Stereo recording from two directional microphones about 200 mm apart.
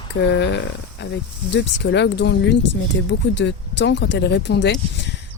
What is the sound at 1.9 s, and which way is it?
Speech, 60° left (ahead or behind).